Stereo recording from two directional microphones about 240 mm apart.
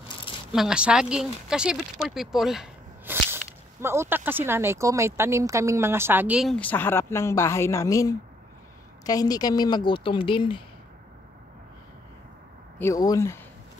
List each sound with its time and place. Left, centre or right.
0.5 s speech: centre; by 10.6 s left
12.7 s speech: centre